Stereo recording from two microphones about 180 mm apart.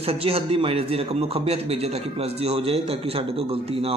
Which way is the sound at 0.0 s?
30° right (ahead or behind).